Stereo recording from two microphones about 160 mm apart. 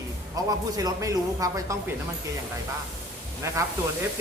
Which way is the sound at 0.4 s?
20° right (ahead or behind).